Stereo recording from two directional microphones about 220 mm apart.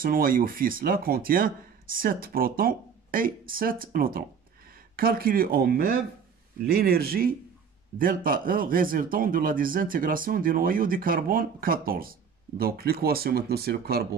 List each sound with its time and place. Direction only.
0.0 s a man's voice: 40° right (ahead or behind)